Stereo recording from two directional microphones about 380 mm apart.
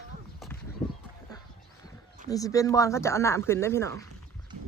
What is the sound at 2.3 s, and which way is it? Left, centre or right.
Speech, centre.